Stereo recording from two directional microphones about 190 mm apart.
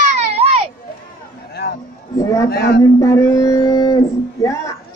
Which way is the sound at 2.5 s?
60° left (ahead or behind).